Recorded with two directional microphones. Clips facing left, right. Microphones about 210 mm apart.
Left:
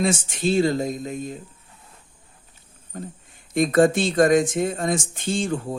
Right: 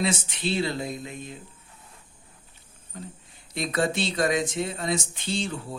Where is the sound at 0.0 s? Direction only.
50° left (ahead or behind).